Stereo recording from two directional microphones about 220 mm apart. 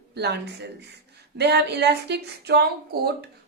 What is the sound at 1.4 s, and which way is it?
A woman's voice, 50° right (ahead or behind).